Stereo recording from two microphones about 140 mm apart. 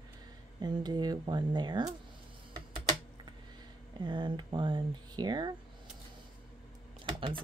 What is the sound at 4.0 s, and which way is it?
Speech, 35° right (ahead or behind).